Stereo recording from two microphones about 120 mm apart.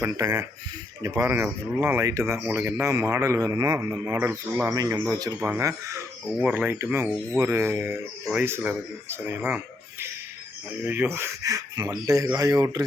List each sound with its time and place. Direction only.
0.0 s speech: 30° right (ahead or behind)
5.4 s speech: 15° right (ahead or behind)
10.8 s speech: 15° right (ahead or behind)